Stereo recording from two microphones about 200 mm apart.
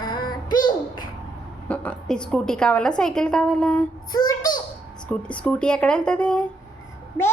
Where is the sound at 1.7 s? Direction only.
5° left (ahead or behind).